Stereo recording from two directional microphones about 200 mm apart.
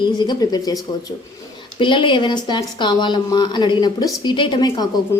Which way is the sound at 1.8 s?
25° left (ahead or behind).